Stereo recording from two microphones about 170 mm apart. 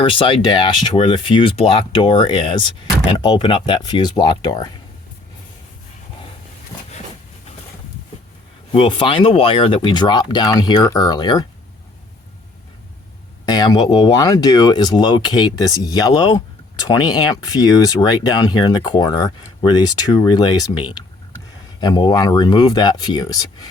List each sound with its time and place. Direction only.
0.0 s speech: 30° left (ahead or behind)
8.7 s speech: 30° left (ahead or behind)
13.4 s speech: 25° left (ahead or behind)